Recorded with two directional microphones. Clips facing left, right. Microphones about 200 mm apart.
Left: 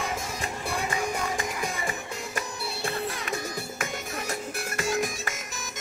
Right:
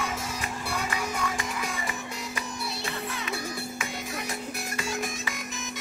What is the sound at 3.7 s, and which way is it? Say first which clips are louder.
Music: left 1 dB; 45° left (ahead or behind).